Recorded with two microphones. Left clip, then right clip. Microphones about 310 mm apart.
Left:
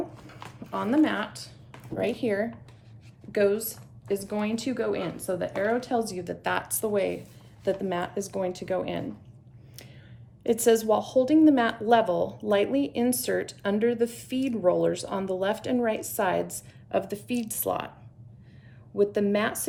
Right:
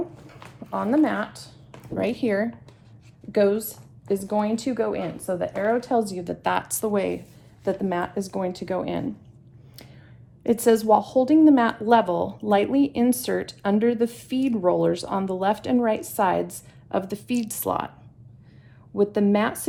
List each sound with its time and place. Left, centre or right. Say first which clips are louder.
0.3 s speech: right 3 dB; centre
2.0 s speech: right 3 dB; centre
10.4 s speech: right 2 dB; centre
18.9 s speech: right 3 dB; centre